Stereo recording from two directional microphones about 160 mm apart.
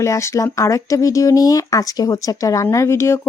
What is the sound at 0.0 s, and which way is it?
Speech, 20° left (ahead or behind).